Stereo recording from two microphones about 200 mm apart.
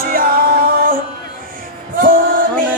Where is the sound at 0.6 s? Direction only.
45° right (ahead or behind).